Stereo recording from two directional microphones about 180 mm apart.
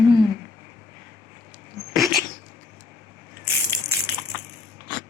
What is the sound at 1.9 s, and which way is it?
Cat, centre (ahead or behind).